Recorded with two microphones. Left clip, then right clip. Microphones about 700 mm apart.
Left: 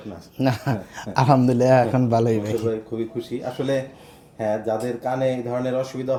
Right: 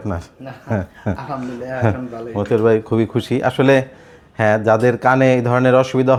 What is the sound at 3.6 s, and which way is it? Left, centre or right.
Speech, right.